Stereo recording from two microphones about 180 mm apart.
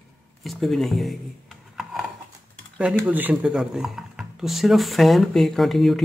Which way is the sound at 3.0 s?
10° right (ahead or behind).